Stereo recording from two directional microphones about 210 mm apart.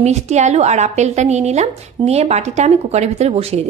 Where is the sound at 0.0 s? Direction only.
30° right (ahead or behind).